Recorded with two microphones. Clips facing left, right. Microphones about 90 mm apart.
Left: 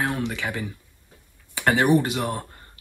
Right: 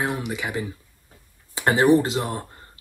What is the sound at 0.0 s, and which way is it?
Speech, 15° right (ahead or behind).